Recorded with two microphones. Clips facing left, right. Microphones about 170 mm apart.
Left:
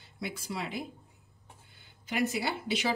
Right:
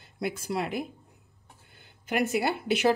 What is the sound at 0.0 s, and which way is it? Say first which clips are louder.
Speech: right 7 dB; 55° right (ahead or behind).